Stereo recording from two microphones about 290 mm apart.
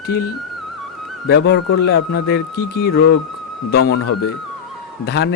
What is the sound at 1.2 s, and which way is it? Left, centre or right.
Speech, left.